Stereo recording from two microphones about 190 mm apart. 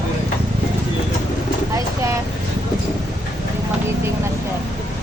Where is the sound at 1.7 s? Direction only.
15° right (ahead or behind).